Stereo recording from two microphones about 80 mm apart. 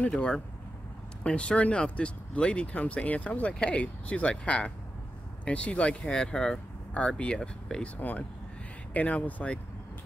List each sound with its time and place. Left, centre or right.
0.0 s speech: centre
8.0 s speech: left